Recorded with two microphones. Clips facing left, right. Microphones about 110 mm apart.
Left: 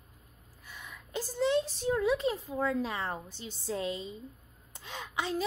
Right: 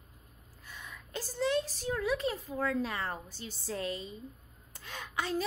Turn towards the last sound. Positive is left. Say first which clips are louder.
# even
turn(degrees=15)  # may be behind; listen again after turning